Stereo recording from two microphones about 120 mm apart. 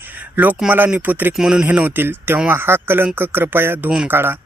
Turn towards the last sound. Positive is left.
turn(degrees=-20)  # may be behind; listen again after turning